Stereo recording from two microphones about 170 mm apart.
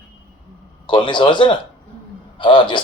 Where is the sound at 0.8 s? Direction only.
25° left (ahead or behind).